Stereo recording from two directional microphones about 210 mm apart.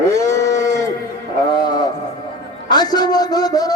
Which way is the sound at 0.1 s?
15° left (ahead or behind).